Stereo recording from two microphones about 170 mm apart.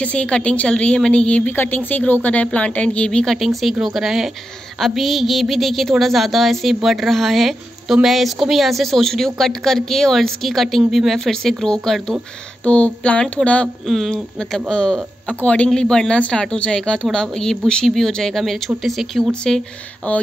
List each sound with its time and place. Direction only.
0.0 s a woman's voice: 5° left (ahead or behind)